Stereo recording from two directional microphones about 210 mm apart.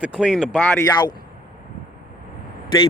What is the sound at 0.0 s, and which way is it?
Speech, 5° right (ahead or behind).